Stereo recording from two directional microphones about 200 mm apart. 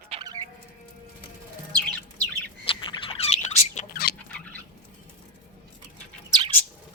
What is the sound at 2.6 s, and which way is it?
Bird, 25° left (ahead or behind).